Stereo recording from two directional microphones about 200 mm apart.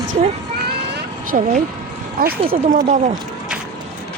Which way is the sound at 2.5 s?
35° right (ahead or behind).